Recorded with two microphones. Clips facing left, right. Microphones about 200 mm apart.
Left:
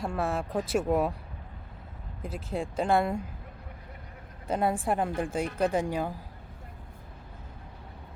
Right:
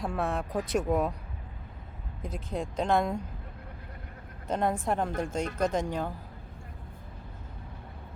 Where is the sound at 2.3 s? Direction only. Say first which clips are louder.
Left 1 dB; 5° left (ahead or behind).